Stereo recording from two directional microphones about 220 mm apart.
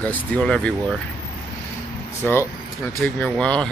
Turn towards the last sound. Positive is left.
turn(degrees=5)  # may be behind; listen again after turning